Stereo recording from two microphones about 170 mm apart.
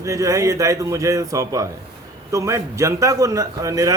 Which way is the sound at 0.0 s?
20° right (ahead or behind).